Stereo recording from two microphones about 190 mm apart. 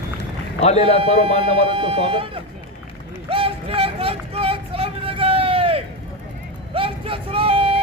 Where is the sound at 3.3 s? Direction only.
30° right (ahead or behind).